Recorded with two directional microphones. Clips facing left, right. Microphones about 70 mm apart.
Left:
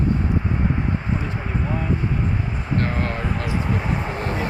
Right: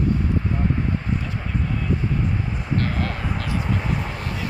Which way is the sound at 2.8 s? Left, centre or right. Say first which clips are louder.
Left 4 dB; left.